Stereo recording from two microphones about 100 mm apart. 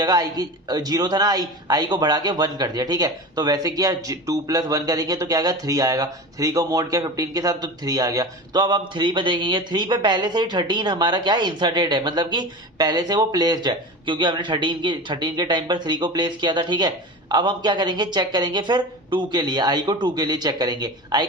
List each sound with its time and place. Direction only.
0.0 s speech: 40° right (ahead or behind)